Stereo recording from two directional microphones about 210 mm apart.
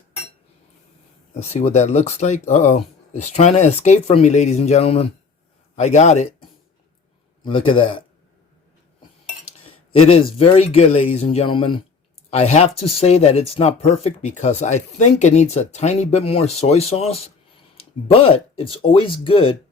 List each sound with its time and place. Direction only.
1.4 s speech: 30° left (ahead or behind)
7.4 s speech: 25° left (ahead or behind)
10.1 s speech: 30° left (ahead or behind)